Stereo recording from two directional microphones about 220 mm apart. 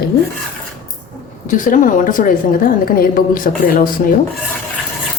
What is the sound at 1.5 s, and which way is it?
A woman's voice, 35° left (ahead or behind).